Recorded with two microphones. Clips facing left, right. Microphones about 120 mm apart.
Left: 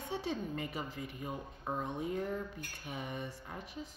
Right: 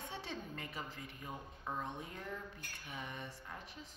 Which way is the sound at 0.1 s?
10° left (ahead or behind).